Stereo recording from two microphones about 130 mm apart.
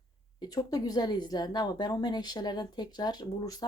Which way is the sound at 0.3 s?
30° left (ahead or behind).